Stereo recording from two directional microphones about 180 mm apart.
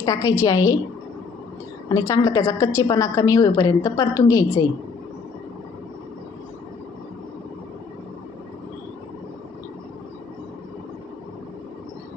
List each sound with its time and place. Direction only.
0.0 s a woman's voice: 20° left (ahead or behind)
1.9 s a woman's voice: 20° left (ahead or behind)